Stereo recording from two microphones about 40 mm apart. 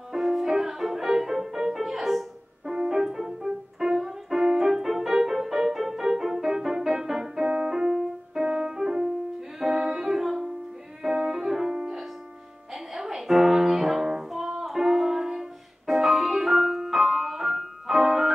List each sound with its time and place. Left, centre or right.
0.1 s music: centre
2.7 s piano: centre
7.4 s piano: right
7.7 s piano: centre
9.6 s music: centre